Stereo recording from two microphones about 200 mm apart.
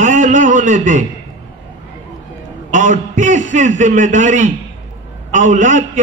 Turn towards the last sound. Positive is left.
turn(degrees=-40)  # may be behind; listen again after turning